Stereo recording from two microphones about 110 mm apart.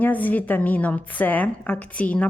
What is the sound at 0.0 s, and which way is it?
A woman's voice, 15° left (ahead or behind).